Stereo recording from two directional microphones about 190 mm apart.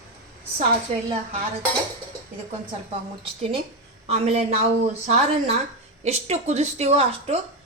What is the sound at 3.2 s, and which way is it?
A woman's voice, 30° right (ahead or behind).